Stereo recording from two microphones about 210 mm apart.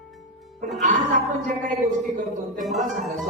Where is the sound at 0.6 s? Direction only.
40° right (ahead or behind).